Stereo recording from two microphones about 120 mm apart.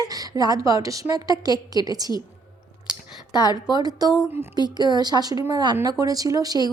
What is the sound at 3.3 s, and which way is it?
Speech, 35° left (ahead or behind).